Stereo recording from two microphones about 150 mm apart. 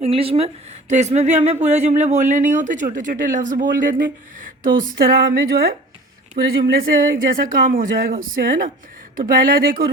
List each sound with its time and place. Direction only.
0.0 s a woman's voice: 40° right (ahead or behind); by 9.9 s 70° right (ahead or behind)